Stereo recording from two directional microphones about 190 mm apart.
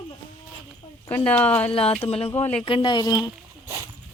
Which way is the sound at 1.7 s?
30° left (ahead or behind).